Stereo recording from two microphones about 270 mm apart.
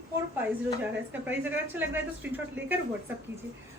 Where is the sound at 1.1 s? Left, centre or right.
Centre.